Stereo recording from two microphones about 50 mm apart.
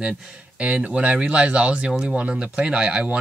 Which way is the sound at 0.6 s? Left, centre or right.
Right.